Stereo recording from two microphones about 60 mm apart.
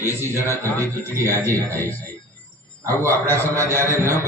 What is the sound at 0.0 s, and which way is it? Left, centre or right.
Speech, right.